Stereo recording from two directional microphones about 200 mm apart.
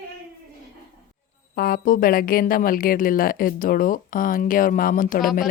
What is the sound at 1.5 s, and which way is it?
A woman's voice, 45° left (ahead or behind).